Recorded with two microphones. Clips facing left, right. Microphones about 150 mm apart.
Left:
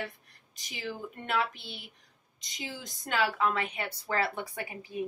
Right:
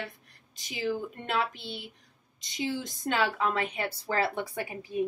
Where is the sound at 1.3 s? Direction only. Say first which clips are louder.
Even; 25° right (ahead or behind).